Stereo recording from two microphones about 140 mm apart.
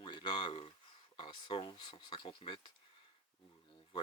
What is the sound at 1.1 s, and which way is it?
Speech, 35° left (ahead or behind).